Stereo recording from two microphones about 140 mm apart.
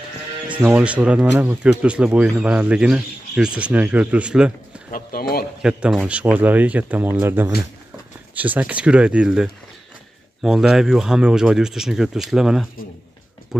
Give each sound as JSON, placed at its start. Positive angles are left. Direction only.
{"t": 0.5, "sound": "speech", "side_deg": -10}
{"t": 4.9, "sound": "speech", "side_deg": 90}
{"t": 5.6, "sound": "speech", "side_deg": -5}